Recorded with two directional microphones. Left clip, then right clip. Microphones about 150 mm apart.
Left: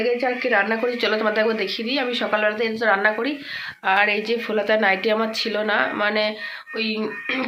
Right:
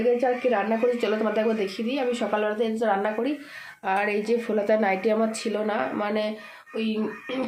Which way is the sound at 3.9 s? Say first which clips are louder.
Left 5 dB; 15° right (ahead or behind).